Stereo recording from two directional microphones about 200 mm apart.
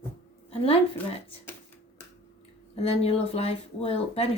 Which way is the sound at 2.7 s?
30° left (ahead or behind).